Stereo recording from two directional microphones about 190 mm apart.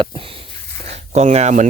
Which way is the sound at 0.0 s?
30° right (ahead or behind).